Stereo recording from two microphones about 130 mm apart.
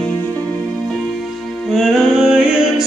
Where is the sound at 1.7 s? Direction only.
Centre (ahead or behind).